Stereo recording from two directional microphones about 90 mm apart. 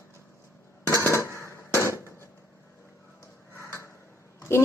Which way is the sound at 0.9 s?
35° left (ahead or behind).